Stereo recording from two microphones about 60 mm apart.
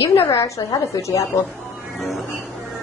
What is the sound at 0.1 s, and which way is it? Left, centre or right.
Speech, left.